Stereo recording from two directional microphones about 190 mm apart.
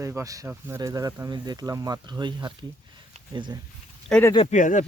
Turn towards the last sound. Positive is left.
turn(degrees=40)  # may be behind; listen again after turning